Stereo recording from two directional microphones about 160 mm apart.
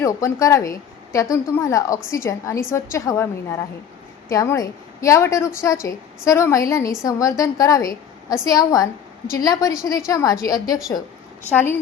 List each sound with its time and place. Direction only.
0.0 s a woman's voice: 20° left (ahead or behind)
4.3 s a woman's voice: 20° left (ahead or behind)